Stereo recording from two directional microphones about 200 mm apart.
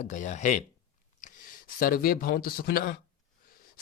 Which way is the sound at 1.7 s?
45° left (ahead or behind).